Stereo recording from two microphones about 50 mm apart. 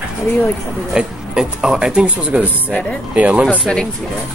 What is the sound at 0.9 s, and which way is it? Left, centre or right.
Speech, centre.